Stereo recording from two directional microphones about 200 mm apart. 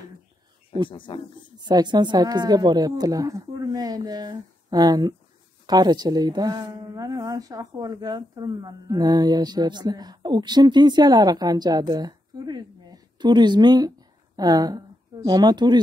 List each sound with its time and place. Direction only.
0.8 s speech: 25° left (ahead or behind)
1.6 s speech: 20° right (ahead or behind)